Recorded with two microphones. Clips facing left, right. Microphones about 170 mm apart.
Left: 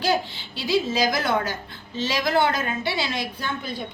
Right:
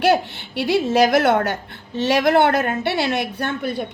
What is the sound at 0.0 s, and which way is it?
A woman's voice, 65° right (ahead or behind).